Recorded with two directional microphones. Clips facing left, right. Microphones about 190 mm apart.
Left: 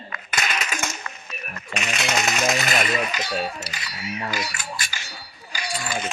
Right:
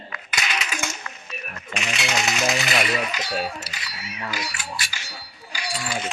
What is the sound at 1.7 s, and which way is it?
Speech, centre (ahead or behind).